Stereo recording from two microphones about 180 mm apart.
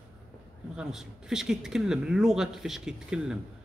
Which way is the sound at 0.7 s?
5° right (ahead or behind).